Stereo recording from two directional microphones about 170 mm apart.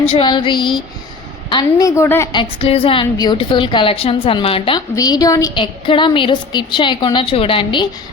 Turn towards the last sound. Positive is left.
turn(degrees=30)  # may be behind; listen again after turning